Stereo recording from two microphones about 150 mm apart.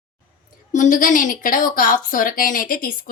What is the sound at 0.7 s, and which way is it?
A woman's voice, 60° left (ahead or behind).